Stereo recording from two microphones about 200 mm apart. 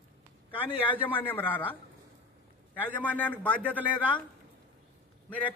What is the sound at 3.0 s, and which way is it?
Speech, 5° left (ahead or behind).